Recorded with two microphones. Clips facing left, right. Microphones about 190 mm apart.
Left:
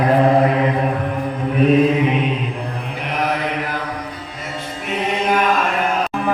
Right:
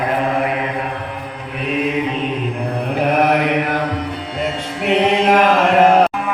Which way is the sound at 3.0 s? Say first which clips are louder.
Right 6 dB; 55° right (ahead or behind).